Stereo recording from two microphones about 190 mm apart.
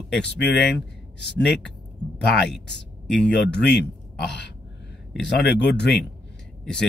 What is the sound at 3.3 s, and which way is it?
Speech, 65° left (ahead or behind).